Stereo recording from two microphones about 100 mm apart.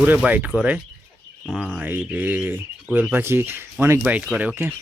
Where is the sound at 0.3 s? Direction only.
15° right (ahead or behind).